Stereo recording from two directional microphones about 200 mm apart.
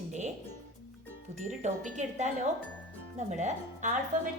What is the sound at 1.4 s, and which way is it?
Speech, 35° right (ahead or behind).